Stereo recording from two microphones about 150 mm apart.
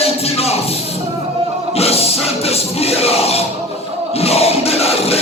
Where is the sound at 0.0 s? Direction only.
40° left (ahead or behind).